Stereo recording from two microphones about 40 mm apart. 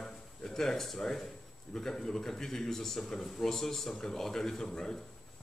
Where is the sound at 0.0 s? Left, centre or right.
Centre.